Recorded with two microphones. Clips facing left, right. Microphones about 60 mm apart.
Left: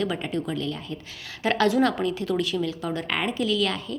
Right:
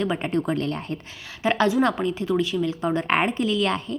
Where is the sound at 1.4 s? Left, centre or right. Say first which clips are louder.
Right 1 dB; right.